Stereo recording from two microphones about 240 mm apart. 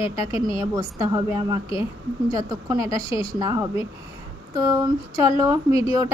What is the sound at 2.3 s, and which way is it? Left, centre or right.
Speech, centre.